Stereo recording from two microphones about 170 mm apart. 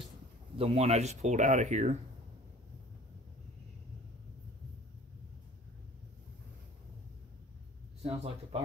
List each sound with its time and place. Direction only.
0.6 s speech: 35° right (ahead or behind)
8.0 s speech: 40° right (ahead or behind)